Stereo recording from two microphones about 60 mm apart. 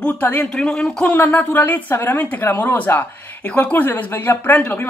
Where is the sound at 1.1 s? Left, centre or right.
Left.